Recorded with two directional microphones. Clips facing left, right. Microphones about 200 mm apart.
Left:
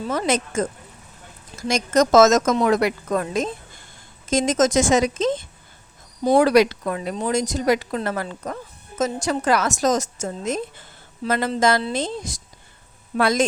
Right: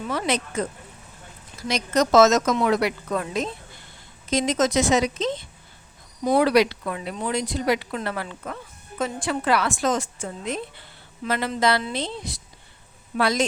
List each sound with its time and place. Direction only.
0.0 s a woman's voice: 45° left (ahead or behind)